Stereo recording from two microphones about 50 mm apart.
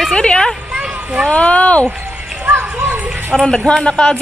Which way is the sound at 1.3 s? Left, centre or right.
Left.